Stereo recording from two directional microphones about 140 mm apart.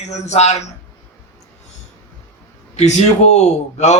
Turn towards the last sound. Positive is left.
turn(degrees=55)  # may be behind; listen again after turning